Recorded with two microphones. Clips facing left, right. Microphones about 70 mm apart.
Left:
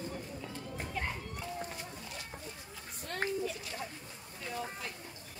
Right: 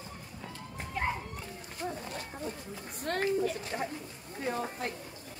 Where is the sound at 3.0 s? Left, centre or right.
Right.